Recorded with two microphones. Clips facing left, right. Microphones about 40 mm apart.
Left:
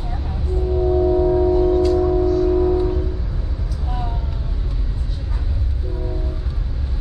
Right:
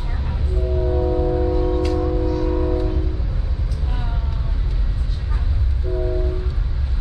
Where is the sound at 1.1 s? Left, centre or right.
Centre.